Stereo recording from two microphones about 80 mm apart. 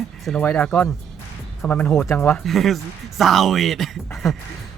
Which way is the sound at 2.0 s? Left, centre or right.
Left.